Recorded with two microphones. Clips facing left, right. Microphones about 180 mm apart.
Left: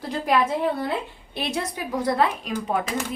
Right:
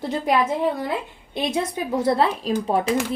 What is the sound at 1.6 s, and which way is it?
A woman's voice, 25° right (ahead or behind).